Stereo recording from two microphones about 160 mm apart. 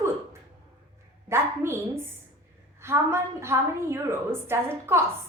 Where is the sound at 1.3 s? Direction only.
15° right (ahead or behind).